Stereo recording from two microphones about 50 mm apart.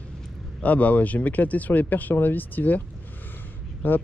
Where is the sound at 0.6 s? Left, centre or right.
Left.